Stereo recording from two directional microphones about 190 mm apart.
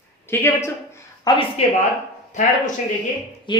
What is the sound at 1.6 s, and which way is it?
Speech, 35° left (ahead or behind).